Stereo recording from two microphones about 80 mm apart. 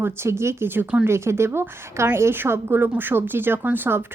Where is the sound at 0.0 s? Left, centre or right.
Right.